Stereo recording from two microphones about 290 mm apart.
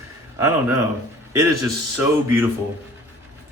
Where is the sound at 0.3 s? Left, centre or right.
Centre.